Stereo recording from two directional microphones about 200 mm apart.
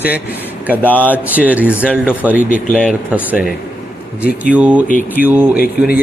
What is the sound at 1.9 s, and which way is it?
Speech, 5° left (ahead or behind).